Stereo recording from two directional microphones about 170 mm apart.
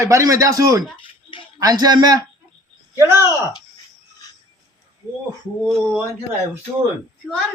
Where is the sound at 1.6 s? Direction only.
20° right (ahead or behind).